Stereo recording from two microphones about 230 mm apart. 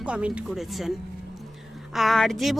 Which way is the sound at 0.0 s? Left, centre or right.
Centre.